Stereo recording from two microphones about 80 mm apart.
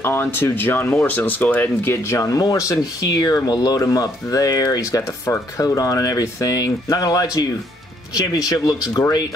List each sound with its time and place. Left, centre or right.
0.0 s speech: left
1.9 s speech: left